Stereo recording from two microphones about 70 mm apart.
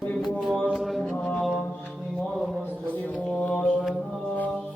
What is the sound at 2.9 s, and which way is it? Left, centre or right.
Music, left.